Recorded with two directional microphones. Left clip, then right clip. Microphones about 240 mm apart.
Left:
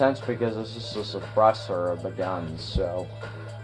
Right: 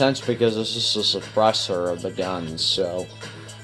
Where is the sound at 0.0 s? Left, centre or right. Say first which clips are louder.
Right 4 dB; right.